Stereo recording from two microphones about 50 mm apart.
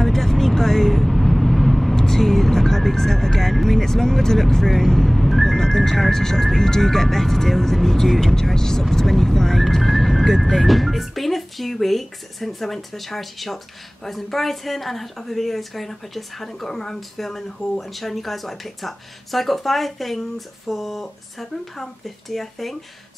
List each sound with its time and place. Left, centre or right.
0.0 s vehicle: centre
8.9 s speech: centre